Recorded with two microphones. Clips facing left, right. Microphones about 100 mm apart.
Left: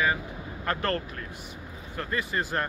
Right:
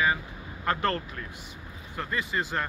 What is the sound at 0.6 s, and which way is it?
Speech, 25° right (ahead or behind).